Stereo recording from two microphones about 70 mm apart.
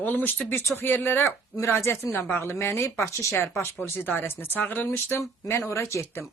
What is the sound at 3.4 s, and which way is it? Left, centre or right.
Speech, left.